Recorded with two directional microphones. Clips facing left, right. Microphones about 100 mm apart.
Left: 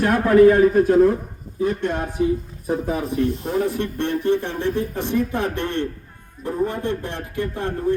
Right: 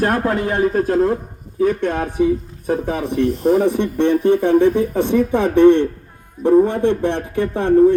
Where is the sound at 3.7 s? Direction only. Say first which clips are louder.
Right 7 dB; 20° right (ahead or behind).